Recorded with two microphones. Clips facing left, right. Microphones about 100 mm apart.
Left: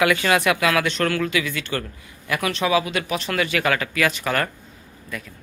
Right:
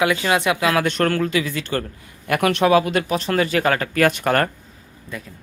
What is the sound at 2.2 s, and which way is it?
Speech, 55° right (ahead or behind).